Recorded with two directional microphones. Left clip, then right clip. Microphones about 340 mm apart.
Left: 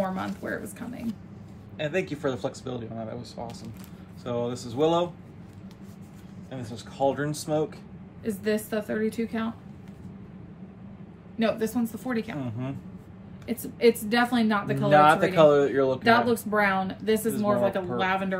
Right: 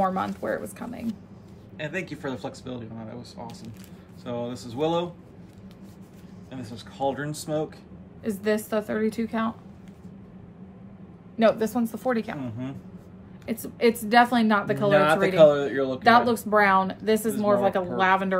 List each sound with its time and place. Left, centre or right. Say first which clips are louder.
0.0 s speech: right 5 dB; centre
1.8 s speech: left 4 dB; centre
6.5 s speech: left 1 dB; centre
8.2 s speech: right 2 dB; centre
11.3 s speech: right 5 dB; centre
13.5 s speech: left 1 dB; centre
14.9 s speech: left 2 dB; centre
16.0 s speech: right 7 dB; centre